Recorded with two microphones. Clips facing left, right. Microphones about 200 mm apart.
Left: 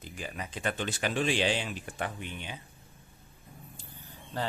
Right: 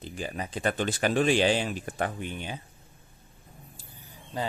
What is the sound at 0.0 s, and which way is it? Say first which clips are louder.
Speech: right 5 dB; 30° right (ahead or behind).